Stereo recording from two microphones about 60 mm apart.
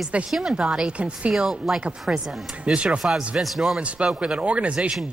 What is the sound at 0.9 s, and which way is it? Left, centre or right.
Speech, centre.